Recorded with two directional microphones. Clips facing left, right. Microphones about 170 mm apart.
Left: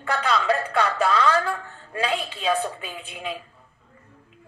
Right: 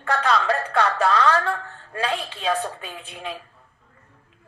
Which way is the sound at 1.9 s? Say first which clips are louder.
Even; 15° left (ahead or behind).